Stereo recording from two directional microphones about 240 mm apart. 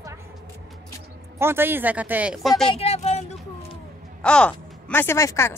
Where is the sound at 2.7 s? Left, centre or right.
Left.